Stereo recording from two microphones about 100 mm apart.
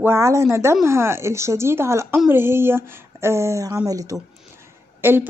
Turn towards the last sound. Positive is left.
turn(degrees=-20)  # may be behind; listen again after turning